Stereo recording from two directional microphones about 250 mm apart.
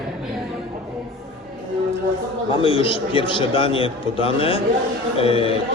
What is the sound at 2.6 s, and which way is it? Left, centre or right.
A man's voice, left.